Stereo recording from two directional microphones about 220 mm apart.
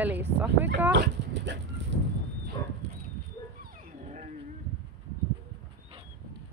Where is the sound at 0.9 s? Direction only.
55° right (ahead or behind).